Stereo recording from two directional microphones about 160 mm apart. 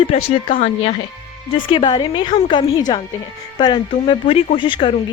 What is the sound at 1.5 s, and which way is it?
A woman's voice, 30° left (ahead or behind).